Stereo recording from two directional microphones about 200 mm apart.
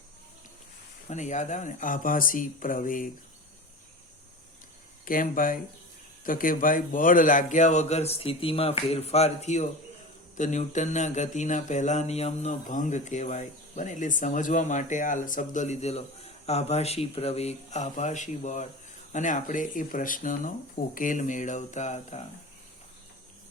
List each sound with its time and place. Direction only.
1.1 s speech: 35° left (ahead or behind)
5.0 s speech: 45° left (ahead or behind)
6.2 s a sound: 45° left (ahead or behind)